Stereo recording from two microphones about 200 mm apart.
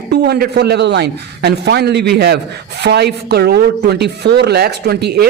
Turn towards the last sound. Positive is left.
turn(degrees=-55)  # may be behind; listen again after turning